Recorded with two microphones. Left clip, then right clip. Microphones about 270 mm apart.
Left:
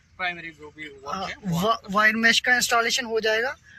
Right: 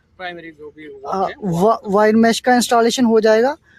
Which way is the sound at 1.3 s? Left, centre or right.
Centre.